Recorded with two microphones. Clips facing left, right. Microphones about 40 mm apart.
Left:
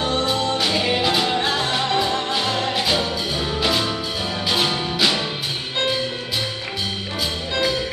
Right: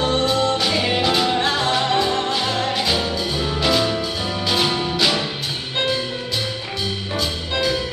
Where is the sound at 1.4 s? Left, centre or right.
Centre.